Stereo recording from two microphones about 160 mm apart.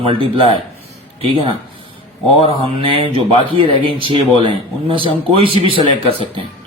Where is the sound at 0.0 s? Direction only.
35° right (ahead or behind).